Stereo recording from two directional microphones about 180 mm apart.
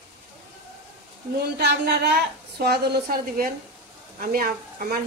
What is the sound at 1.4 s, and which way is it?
A woman's voice, 65° right (ahead or behind).